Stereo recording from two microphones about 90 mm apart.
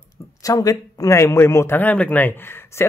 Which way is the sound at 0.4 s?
40° left (ahead or behind).